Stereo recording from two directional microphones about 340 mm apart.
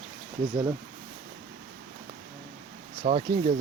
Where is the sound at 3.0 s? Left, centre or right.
Centre.